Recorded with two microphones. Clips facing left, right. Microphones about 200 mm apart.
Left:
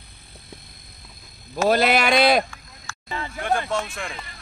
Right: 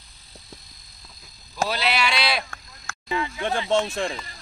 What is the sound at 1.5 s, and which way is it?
Speech, 50° left (ahead or behind).